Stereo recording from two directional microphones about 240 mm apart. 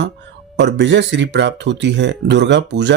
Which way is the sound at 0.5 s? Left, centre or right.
Right.